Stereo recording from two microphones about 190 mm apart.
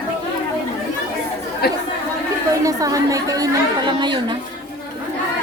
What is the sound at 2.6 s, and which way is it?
A woman's voice, 20° right (ahead or behind).